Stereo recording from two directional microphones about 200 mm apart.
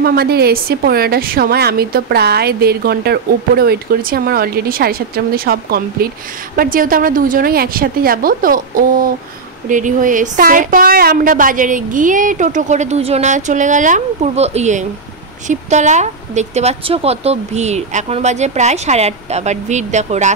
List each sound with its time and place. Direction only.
0.0 s a woman's voice: 50° right (ahead or behind)